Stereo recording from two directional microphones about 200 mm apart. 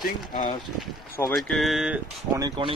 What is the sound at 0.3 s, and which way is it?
Speech, 45° left (ahead or behind).